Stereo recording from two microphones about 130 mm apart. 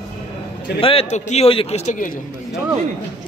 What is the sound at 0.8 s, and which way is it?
A man's voice, 50° left (ahead or behind).